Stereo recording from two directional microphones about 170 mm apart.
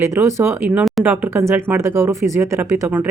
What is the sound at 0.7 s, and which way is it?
Speech, 5° right (ahead or behind).